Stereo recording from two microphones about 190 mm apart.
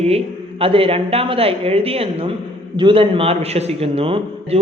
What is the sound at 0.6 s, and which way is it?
A man's voice, 30° right (ahead or behind).